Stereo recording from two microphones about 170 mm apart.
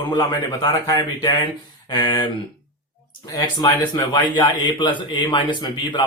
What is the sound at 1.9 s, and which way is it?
Speech, 20° left (ahead or behind).